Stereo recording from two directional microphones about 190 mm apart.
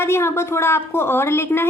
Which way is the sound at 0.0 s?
15° left (ahead or behind).